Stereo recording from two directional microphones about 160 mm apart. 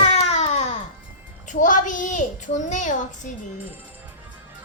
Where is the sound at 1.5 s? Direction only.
55° left (ahead or behind).